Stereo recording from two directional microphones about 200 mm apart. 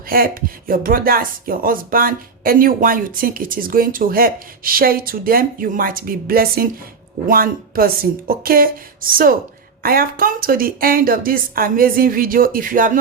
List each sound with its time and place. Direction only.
0.1 s speech: 45° right (ahead or behind)